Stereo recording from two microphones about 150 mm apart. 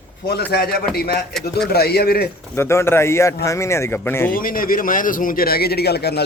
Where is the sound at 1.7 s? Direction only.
90° left.